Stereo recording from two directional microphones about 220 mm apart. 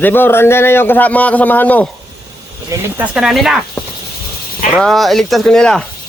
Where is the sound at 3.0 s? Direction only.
5° right (ahead or behind).